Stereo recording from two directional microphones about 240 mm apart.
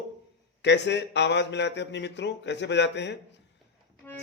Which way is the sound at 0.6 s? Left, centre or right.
Left.